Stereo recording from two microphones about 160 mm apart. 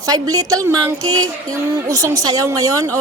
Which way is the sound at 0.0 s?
20° right (ahead or behind).